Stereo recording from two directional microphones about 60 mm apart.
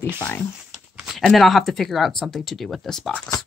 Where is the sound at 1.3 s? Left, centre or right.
Centre.